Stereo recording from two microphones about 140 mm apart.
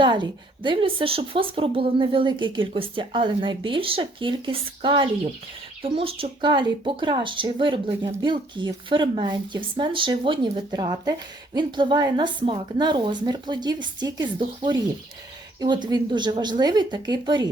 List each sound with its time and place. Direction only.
0.0 s speech: 35° right (ahead or behind)